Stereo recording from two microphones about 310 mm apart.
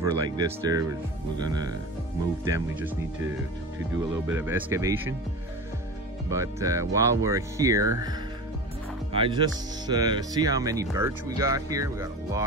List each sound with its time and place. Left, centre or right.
0.0 s speech: centre
6.3 s speech: centre
9.1 s speech: centre